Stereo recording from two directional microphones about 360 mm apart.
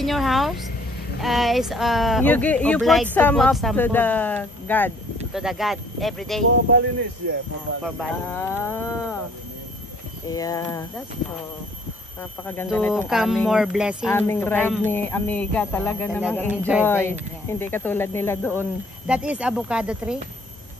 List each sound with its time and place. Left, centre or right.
0.0 s speech: centre
7.8 s speech: centre
10.2 s speech: centre
12.2 s speech: centre